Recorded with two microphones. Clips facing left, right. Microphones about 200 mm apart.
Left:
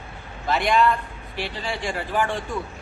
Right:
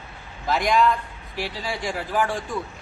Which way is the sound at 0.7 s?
5° right (ahead or behind).